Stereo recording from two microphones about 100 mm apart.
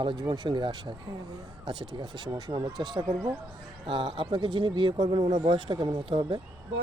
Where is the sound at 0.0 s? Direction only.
50° right (ahead or behind).